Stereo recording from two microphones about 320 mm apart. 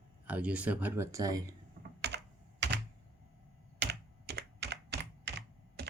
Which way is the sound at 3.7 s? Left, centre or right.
Right.